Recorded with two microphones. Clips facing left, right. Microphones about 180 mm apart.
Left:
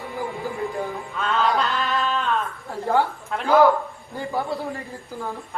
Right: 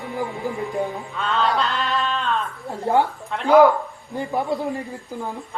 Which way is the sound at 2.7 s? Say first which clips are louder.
Right 2 dB; 20° right (ahead or behind).